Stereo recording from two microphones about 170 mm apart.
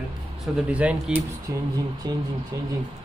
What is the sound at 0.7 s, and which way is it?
Speech, 5° right (ahead or behind).